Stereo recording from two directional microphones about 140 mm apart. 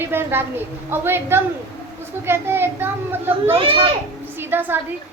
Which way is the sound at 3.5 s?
40° right (ahead or behind).